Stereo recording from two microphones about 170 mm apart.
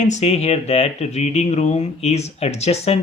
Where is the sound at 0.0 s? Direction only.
40° left (ahead or behind).